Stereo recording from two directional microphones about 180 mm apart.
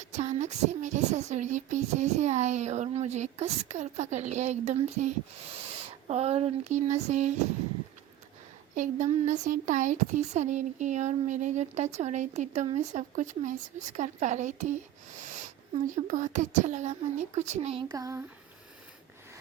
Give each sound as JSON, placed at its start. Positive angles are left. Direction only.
{"t": 0.0, "sound": "speech", "side_deg": -40}
{"t": 8.7, "sound": "speech", "side_deg": -40}
{"t": 17.9, "sound": "a sound", "side_deg": -15}